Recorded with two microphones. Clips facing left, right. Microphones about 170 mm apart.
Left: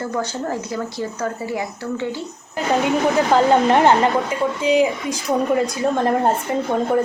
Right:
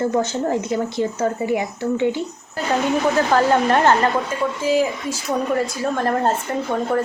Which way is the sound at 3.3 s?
20° left (ahead or behind).